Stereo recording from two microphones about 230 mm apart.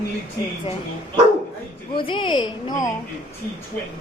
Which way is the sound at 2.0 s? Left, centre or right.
Left.